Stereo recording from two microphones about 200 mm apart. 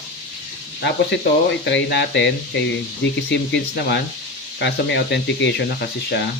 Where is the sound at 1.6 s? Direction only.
60° left (ahead or behind).